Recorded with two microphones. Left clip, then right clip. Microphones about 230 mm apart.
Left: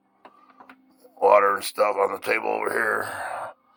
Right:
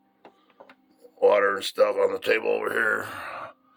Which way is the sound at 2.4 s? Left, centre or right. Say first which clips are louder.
Even; centre.